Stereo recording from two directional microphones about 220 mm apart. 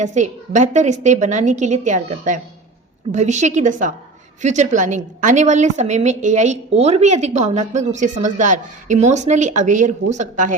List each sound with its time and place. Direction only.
0.0 s a woman's voice: 35° right (ahead or behind)